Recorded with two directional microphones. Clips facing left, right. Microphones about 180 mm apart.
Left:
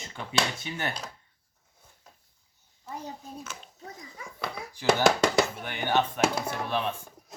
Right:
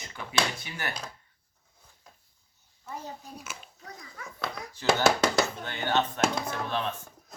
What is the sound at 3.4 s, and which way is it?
Speech, 10° right (ahead or behind).